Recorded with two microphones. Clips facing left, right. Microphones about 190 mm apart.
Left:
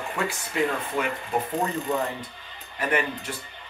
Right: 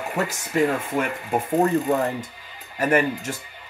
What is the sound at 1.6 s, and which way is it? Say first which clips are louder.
Speech: right 7 dB; 45° right (ahead or behind).